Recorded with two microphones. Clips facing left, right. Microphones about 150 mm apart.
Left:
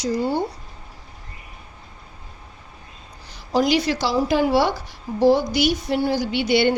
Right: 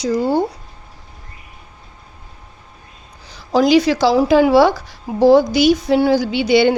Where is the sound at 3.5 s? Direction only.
90° right.